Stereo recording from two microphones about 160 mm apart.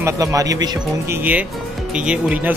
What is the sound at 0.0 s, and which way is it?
Speech, 20° right (ahead or behind).